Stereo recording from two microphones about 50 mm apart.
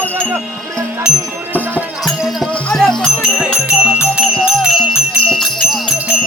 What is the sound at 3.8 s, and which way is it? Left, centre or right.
Music, right.